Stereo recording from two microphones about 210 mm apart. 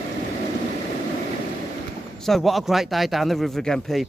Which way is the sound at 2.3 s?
Centre (ahead or behind).